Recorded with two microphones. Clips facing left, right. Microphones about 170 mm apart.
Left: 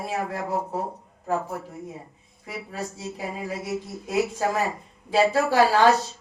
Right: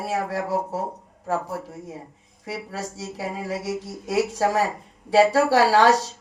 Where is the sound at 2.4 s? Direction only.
80° right.